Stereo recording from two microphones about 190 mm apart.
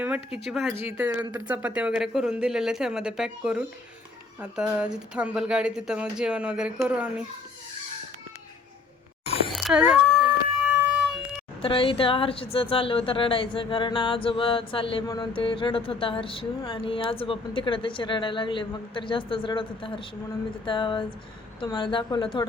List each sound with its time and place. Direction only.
0.0 s speech: 5° right (ahead or behind)
9.5 s a sound: centre (ahead or behind)
11.6 s speech: 30° left (ahead or behind)